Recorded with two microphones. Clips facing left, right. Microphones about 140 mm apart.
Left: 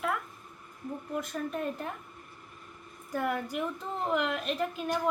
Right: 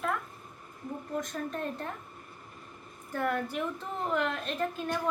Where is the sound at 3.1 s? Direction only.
10° left (ahead or behind).